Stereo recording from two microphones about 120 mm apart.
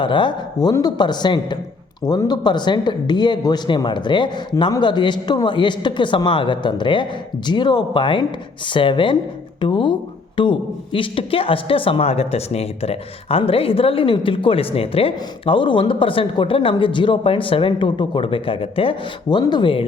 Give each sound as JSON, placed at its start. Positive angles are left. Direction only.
{"t": 0.0, "sound": "speech", "side_deg": 40}